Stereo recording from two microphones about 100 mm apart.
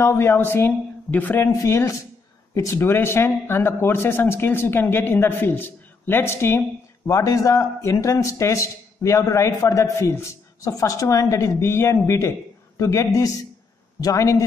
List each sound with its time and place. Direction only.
0.0 s speech: 25° left (ahead or behind)
1.5 s a man's voice: 30° left (ahead or behind)